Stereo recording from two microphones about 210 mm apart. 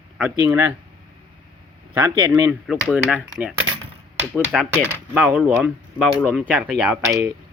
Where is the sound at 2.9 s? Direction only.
5° right (ahead or behind).